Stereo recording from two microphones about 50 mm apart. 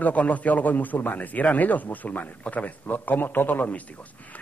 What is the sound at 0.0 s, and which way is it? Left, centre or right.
A man's voice, left.